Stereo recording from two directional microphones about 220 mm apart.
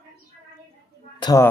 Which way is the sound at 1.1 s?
15° left (ahead or behind).